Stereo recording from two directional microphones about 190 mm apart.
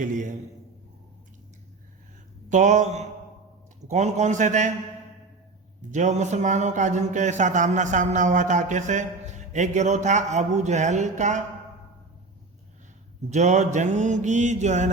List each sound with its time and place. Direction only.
0.0 s a man's voice: 40° right (ahead or behind)
2.5 s speech: 40° right (ahead or behind)
5.9 s speech: 40° right (ahead or behind)
13.3 s speech: 40° right (ahead or behind)